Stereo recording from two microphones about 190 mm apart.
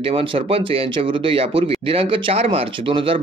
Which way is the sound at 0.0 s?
30° right (ahead or behind).